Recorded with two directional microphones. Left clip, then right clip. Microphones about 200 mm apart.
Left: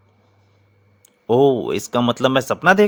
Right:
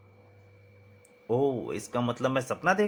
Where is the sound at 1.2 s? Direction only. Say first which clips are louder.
Left 12 dB; 50° left (ahead or behind).